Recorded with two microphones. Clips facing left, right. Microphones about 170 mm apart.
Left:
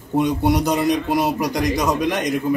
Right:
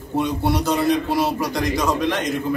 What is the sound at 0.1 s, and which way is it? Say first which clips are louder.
A man's voice: left 3 dB; 15° left (ahead or behind).